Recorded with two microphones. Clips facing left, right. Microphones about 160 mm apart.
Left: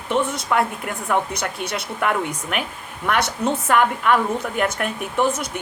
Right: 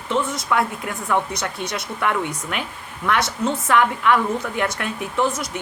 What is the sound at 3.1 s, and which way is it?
Speech, 60° left (ahead or behind).